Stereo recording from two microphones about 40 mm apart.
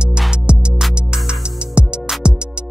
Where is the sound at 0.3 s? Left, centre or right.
Right.